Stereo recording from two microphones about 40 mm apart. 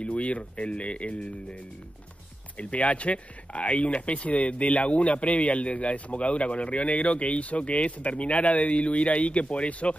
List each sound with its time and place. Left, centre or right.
0.0 s speech: left
2.5 s speech: left